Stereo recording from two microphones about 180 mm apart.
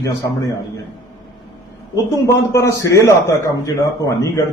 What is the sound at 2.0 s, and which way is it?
A man's voice, 15° left (ahead or behind).